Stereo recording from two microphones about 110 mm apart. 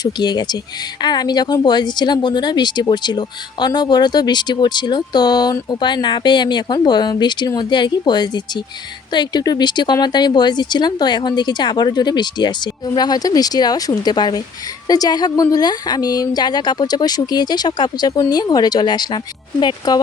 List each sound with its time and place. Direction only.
0.0 s speech: 40° left (ahead or behind)